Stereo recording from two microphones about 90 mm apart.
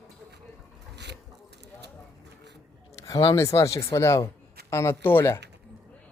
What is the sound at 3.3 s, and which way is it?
Speech, 35° left (ahead or behind).